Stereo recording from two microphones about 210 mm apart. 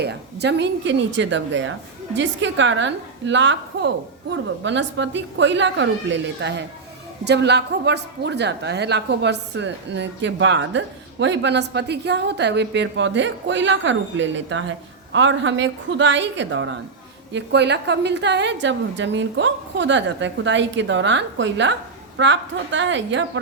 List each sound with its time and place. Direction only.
0.0 s speech: 50° right (ahead or behind)